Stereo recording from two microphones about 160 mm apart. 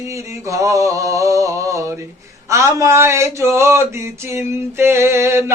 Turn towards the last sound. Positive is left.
turn(degrees=-15)  # may be behind; listen again after turning